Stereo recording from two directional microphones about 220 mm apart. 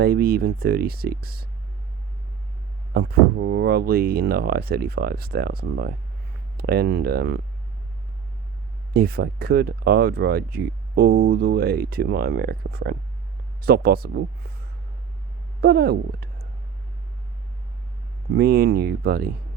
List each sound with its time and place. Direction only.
0.0 s speech: 45° right (ahead or behind)
2.9 s speech: 45° right (ahead or behind)
8.9 s speech: 45° right (ahead or behind)
15.6 s speech: 45° right (ahead or behind)
18.3 s speech: 45° right (ahead or behind)